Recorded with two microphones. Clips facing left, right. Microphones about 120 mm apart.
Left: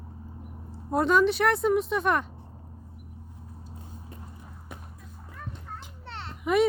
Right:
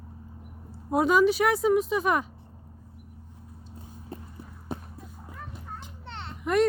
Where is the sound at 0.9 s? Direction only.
5° right (ahead or behind).